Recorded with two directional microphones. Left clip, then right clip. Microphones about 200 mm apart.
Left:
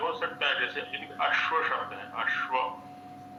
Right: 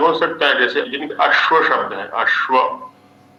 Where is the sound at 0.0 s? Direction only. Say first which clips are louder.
Right 15 dB; 55° right (ahead or behind).